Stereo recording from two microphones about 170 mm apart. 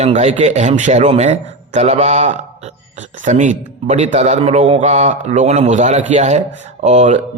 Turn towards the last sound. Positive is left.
turn(degrees=-40)  # may be behind; listen again after turning